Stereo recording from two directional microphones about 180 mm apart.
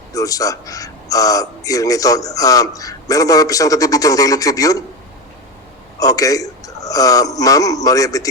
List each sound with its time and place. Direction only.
0.1 s a man's voice: 20° left (ahead or behind)
6.0 s a man's voice: 20° left (ahead or behind)